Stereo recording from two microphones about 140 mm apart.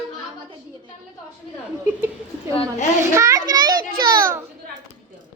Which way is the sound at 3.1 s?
25° right (ahead or behind).